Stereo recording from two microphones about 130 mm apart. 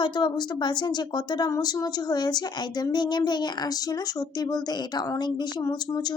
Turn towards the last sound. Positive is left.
turn(degrees=35)  # may be behind; listen again after turning